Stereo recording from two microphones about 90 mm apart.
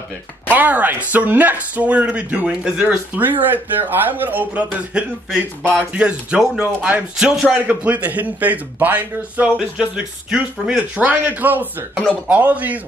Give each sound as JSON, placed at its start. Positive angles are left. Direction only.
{"t": 0.5, "sound": "a man's voice", "side_deg": -20}
{"t": 11.9, "sound": "speech", "side_deg": 10}
{"t": 12.3, "sound": "a man's voice", "side_deg": -20}